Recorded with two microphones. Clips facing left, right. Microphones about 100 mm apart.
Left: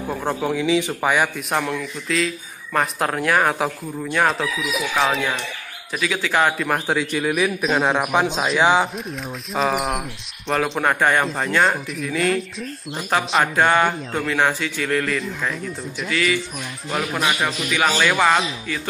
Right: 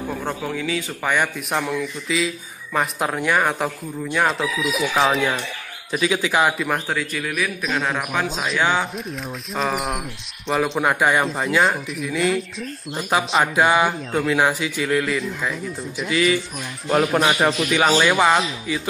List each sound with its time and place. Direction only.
0.1 s a man's voice: 15° left (ahead or behind)
1.0 s speech: 10° left (ahead or behind)
5.9 s a man's voice: 20° right (ahead or behind)
6.9 s a man's voice: 20° left (ahead or behind)
8.9 s speech: centre (ahead or behind)
16.1 s speech: 25° right (ahead or behind)
17.9 s a man's voice: 15° right (ahead or behind)